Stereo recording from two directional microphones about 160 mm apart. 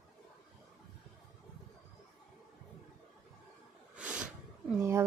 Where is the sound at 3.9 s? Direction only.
5° right (ahead or behind).